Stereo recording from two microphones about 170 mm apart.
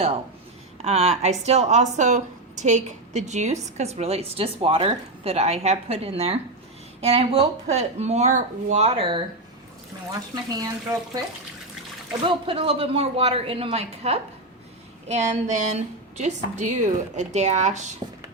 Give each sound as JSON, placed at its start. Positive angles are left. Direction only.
{"t": 0.9, "sound": "a woman's voice", "side_deg": -40}
{"t": 12.2, "sound": "a woman's voice", "side_deg": -30}